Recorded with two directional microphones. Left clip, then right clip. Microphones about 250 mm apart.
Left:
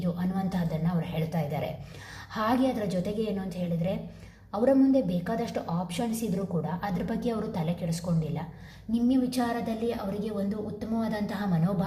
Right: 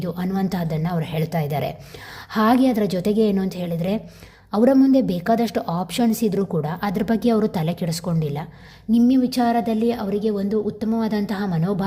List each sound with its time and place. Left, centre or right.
0.0 s a woman's voice: right